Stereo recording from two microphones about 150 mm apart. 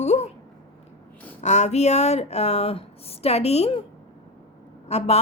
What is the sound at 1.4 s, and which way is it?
A woman's voice, 50° left (ahead or behind).